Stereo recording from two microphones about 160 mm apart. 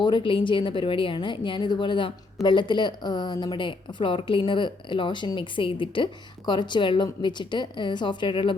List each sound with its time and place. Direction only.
0.0 s a woman's voice: 30° left (ahead or behind)